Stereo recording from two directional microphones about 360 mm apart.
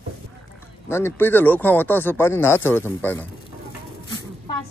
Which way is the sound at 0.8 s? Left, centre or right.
Centre.